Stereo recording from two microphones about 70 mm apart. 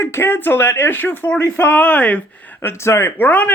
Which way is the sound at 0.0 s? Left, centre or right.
Left.